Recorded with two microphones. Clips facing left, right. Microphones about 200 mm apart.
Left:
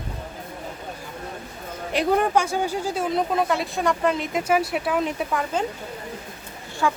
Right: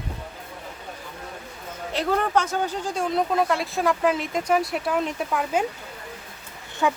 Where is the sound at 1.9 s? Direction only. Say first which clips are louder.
Left 3 dB; 15° left (ahead or behind); by 5.6 s 5° right (ahead or behind).